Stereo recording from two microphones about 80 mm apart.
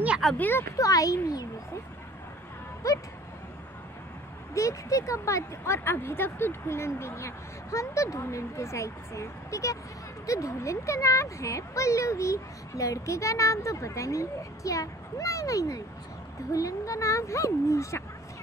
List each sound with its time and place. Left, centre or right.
0.4 s speech: left
0.7 s speech: left
2.8 s speech: left
4.6 s speech: left